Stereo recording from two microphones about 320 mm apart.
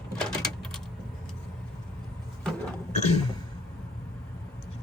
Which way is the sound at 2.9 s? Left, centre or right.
Left.